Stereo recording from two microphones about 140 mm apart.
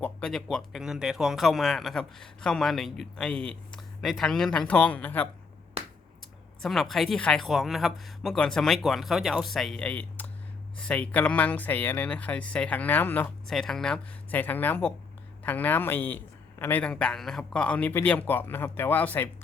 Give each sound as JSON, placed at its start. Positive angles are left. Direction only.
{"t": 0.0, "sound": "speech", "side_deg": 5}
{"t": 5.8, "sound": "finger snapping", "side_deg": -45}
{"t": 6.6, "sound": "a man's voice", "side_deg": 0}